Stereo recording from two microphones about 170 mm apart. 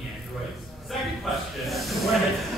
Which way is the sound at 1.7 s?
Centre (ahead or behind).